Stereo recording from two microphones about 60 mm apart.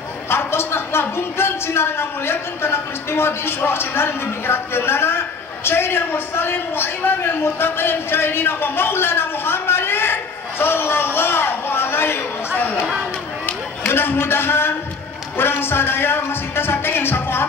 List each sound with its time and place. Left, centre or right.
0.3 s a man's voice: left
13.5 s a man's voice: left